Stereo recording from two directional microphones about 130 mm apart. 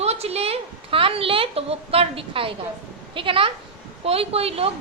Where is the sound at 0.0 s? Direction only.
55° right (ahead or behind).